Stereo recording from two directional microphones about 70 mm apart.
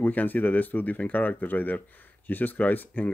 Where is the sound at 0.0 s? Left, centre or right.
Left.